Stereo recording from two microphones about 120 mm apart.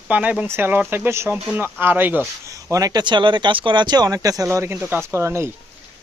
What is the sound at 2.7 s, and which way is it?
Speech, 30° right (ahead or behind).